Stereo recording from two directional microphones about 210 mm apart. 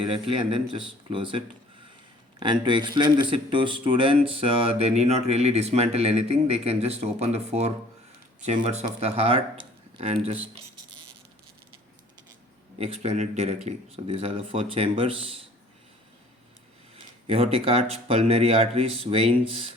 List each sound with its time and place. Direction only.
0.1 s speech: 25° right (ahead or behind)
2.4 s speech: 20° right (ahead or behind)
12.8 s a man's voice: 30° right (ahead or behind)
17.2 s speech: 25° right (ahead or behind)